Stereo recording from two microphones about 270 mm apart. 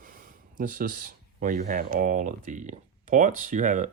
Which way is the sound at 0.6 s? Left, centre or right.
Right.